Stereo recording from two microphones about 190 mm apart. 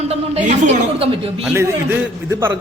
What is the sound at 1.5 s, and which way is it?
A man's voice, 15° right (ahead or behind).